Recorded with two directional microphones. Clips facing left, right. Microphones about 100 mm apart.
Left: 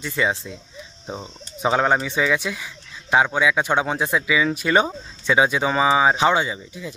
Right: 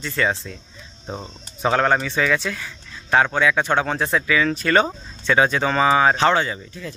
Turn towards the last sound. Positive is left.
turn(degrees=15)  # may be behind; listen again after turning